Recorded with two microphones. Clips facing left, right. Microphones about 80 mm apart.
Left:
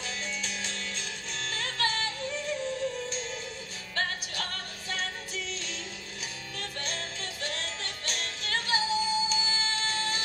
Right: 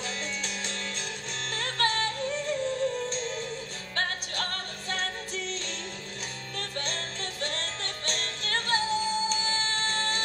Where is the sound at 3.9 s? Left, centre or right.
Right.